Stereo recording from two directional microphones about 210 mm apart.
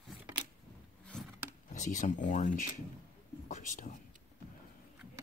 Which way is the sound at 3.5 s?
35° left (ahead or behind).